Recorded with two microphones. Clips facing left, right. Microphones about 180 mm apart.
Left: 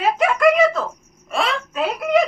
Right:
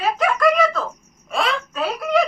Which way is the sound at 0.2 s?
25° left (ahead or behind).